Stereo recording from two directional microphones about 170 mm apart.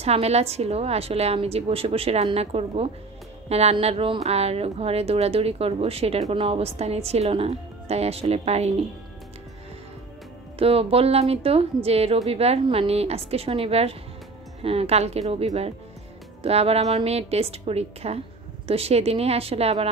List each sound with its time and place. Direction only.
0.0 s speech: 35° right (ahead or behind)
10.6 s speech: 35° right (ahead or behind)